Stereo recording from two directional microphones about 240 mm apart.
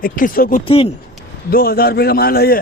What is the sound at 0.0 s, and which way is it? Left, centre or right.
Speech, left.